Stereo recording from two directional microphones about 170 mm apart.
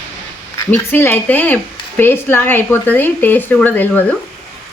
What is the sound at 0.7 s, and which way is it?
Speech, 10° left (ahead or behind).